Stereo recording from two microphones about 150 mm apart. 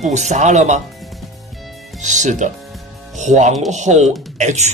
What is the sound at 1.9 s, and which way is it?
Speech, 55° right (ahead or behind).